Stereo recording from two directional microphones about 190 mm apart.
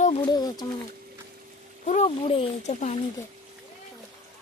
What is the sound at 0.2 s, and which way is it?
Speech, 20° left (ahead or behind).